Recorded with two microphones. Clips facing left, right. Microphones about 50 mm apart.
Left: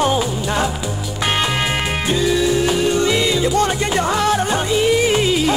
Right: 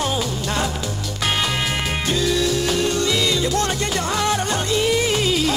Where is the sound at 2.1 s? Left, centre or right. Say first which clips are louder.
Left 4 dB; centre.